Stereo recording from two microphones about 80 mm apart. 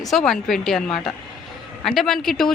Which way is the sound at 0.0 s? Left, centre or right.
Centre.